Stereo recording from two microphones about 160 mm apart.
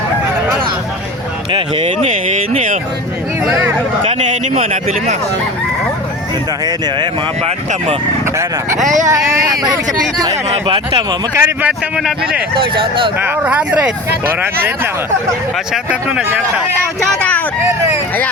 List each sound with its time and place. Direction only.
1.5 s speech: 30° right (ahead or behind)
4.0 s speech: 40° right (ahead or behind)
6.7 s speech: 25° right (ahead or behind)
7.4 s speech: 40° right (ahead or behind)
9.0 s speech: 20° right (ahead or behind)
11.3 s speech: 15° right (ahead or behind)
11.9 s speech: 5° right (ahead or behind)
12.5 s speech: 30° right (ahead or behind)
13.1 s speech: 10° right (ahead or behind)
15.7 s speech: 5° right (ahead or behind)